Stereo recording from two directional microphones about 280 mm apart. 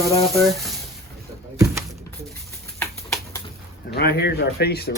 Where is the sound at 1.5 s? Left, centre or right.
Centre.